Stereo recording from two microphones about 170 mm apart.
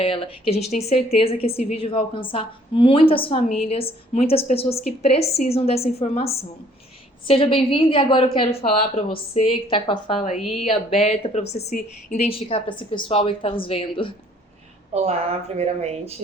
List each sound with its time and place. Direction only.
0.0 s a woman's voice: 35° left (ahead or behind)
10.2 s a woman's voice: 40° left (ahead or behind)
12.2 s a woman's voice: 35° left (ahead or behind)
14.9 s speech: 40° right (ahead or behind)